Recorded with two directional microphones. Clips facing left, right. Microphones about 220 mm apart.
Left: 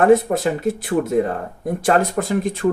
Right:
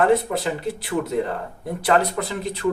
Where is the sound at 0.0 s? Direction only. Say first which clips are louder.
Left 5 dB; 50° left (ahead or behind).